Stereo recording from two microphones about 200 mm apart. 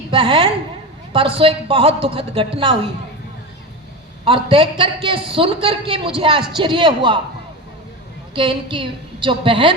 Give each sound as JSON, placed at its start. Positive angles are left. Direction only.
{"t": 0.1, "sound": "a woman's voice", "side_deg": -25}
{"t": 4.3, "sound": "a woman's voice", "side_deg": -25}
{"t": 8.4, "sound": "a woman's voice", "side_deg": -25}